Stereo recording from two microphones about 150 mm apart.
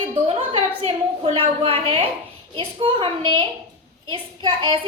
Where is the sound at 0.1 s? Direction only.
35° right (ahead or behind).